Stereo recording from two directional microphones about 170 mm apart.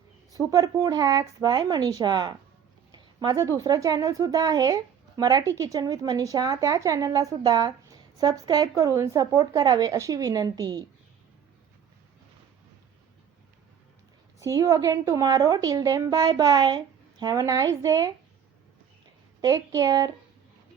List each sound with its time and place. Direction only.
0.3 s speech: 20° right (ahead or behind)
14.3 s speech: 20° right (ahead or behind)
19.4 s speech: 20° right (ahead or behind)